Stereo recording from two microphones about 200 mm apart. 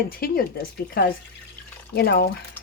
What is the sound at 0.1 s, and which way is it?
Speech, 50° left (ahead or behind).